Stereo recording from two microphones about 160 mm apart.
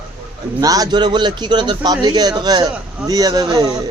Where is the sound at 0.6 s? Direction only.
25° right (ahead or behind).